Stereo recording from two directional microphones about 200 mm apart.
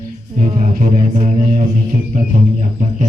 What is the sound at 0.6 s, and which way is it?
Music, 45° right (ahead or behind).